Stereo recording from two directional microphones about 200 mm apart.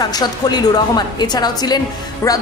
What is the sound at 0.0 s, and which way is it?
Speech, 20° left (ahead or behind).